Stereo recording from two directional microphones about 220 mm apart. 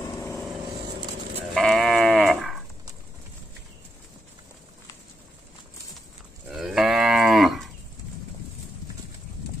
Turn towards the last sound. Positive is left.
turn(degrees=0)  # may be behind; listen again after turning